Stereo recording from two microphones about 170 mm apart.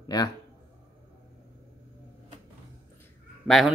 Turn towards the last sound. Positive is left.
turn(degrees=0)  # may be behind; listen again after turning